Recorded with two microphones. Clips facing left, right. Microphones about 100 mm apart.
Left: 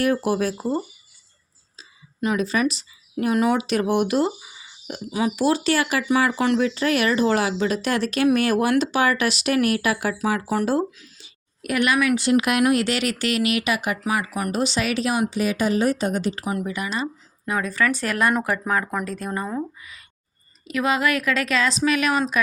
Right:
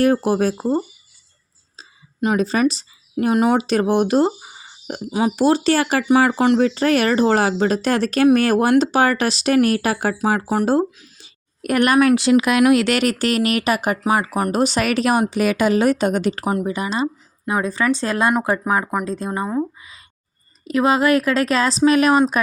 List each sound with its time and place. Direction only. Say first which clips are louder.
0.0 s speech: right 5 dB; 30° right (ahead or behind)
2.2 s speech: right 4 dB; 30° right (ahead or behind)
11.2 s a sound: right 7 dB; 45° right (ahead or behind)
12.1 s speech: right 4 dB; 90° right
13.0 s speech: right 4 dB; 45° right (ahead or behind); by 16.5 s 65° right (ahead or behind)
16.6 s speech: right 5 dB; 30° right (ahead or behind)
20.7 s speech: right 6 dB; 35° right (ahead or behind)